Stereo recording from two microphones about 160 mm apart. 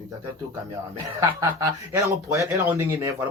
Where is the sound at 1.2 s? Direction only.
20° right (ahead or behind).